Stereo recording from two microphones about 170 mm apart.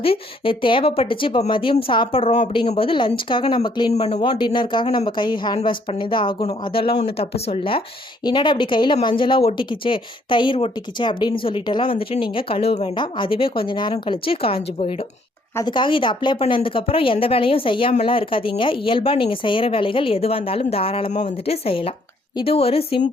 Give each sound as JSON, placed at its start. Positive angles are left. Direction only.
{"t": 0.0, "sound": "a woman's voice", "side_deg": 30}
{"t": 3.9, "sound": "a woman's voice", "side_deg": 40}